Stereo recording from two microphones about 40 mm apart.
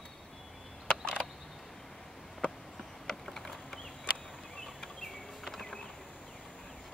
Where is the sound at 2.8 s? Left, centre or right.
Centre.